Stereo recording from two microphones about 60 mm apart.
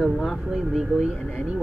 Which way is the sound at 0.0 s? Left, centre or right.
Centre.